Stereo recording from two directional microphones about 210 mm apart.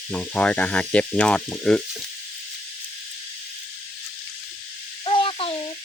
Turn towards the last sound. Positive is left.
turn(degrees=25)  # may be behind; listen again after turning